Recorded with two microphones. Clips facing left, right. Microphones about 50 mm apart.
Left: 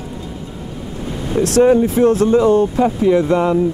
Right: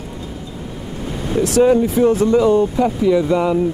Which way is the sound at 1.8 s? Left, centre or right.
Left.